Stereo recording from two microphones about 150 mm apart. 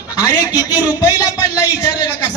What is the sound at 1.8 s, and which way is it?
Speech, 30° left (ahead or behind).